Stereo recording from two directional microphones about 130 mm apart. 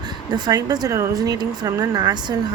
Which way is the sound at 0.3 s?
30° right (ahead or behind).